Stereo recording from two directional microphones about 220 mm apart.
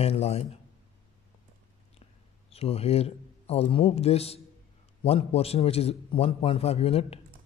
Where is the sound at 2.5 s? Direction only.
25° left (ahead or behind).